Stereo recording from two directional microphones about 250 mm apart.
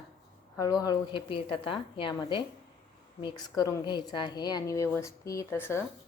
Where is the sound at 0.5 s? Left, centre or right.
Centre.